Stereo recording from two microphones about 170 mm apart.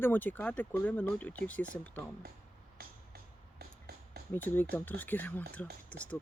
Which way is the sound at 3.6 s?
65° right (ahead or behind).